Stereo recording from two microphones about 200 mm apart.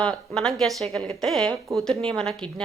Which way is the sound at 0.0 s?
5° left (ahead or behind).